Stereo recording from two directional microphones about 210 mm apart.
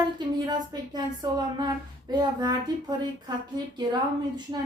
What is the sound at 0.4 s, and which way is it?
Speech, 20° right (ahead or behind).